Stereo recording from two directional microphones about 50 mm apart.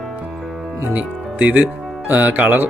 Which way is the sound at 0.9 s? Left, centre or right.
Right.